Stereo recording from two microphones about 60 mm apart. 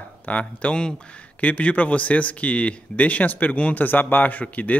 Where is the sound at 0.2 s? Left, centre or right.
Left.